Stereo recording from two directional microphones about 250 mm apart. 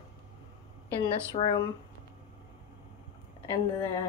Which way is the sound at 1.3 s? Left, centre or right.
Centre.